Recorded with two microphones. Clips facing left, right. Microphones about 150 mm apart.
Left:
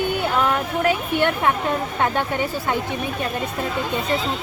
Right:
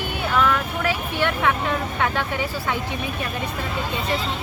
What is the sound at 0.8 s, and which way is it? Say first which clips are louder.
Speech: left 4 dB; 50° left (ahead or behind).